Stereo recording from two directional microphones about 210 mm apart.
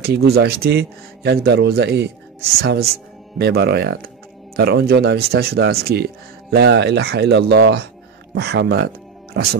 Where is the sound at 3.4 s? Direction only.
50° right (ahead or behind).